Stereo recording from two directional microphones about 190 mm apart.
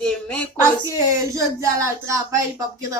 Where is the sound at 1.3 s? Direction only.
15° right (ahead or behind).